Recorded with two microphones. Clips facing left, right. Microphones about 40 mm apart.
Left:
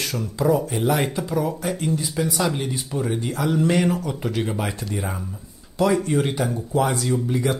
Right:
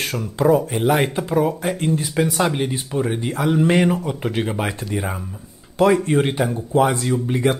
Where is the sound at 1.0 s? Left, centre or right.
Right.